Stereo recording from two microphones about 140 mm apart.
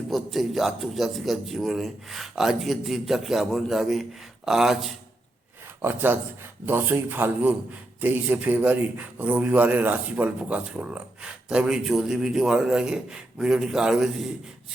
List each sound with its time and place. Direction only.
0.1 s a man's voice: centre (ahead or behind)
5.8 s speech: 15° right (ahead or behind)